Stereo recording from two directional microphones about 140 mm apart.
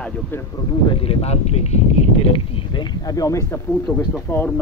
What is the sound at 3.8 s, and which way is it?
Speech, 10° left (ahead or behind).